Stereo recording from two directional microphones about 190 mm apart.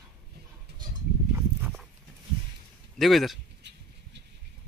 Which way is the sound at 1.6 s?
Centre (ahead or behind).